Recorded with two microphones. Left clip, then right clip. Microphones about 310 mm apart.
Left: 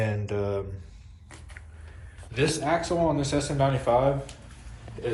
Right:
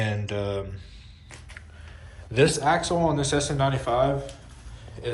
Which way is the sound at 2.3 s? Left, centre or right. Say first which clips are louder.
Right 4 dB; centre.